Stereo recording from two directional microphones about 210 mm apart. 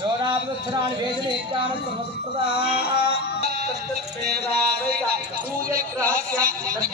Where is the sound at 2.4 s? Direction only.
50° left (ahead or behind).